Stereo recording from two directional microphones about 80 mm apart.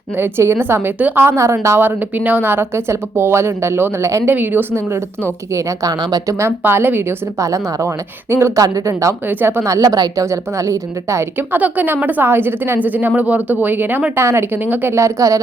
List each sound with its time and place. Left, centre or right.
0.2 s speech: right
1.8 s speech: right
6.6 s a woman's voice: right
7.3 s a woman's voice: right
9.2 s a woman's voice: right
9.6 s a woman's voice: right
11.3 s a woman's voice: right
14.3 s speech: right